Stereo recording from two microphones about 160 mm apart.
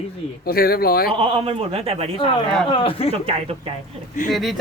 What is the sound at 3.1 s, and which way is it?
Speech, 35° right (ahead or behind).